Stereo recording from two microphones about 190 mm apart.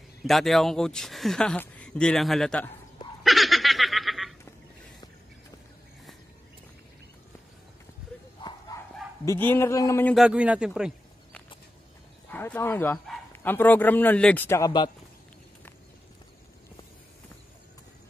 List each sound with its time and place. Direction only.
0.2 s speech: centre (ahead or behind)
3.3 s giggle: centre (ahead or behind)
8.4 s bow-wow: 25° left (ahead or behind)
9.2 s speech: 15° left (ahead or behind)
10.1 s speech: 5° right (ahead or behind)
12.3 s speech: 10° left (ahead or behind)